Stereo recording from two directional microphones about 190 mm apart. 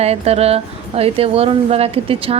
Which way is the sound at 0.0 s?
35° right (ahead or behind).